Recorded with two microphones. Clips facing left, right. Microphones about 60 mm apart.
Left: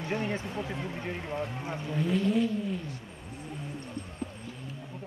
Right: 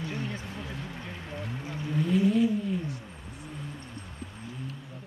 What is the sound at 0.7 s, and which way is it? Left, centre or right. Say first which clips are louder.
Speech: left 3 dB; left.